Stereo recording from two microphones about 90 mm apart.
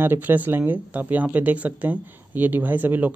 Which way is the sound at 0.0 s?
25° right (ahead or behind).